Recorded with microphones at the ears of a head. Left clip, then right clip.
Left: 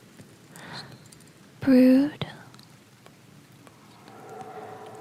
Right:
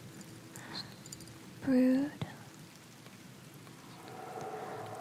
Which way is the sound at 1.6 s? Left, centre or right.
Left.